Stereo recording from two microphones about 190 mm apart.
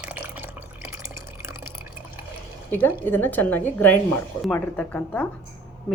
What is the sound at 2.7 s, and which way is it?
A woman's voice, 10° left (ahead or behind).